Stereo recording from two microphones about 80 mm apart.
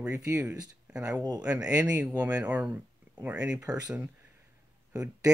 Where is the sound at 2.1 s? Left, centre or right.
Centre.